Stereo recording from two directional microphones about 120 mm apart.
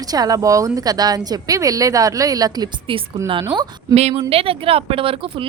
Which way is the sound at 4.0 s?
55° right (ahead or behind).